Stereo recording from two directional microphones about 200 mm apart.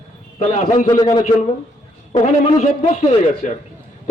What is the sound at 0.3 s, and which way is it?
Speech, 35° left (ahead or behind).